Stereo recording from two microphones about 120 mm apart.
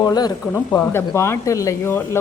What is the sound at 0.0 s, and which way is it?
Speech, 35° left (ahead or behind).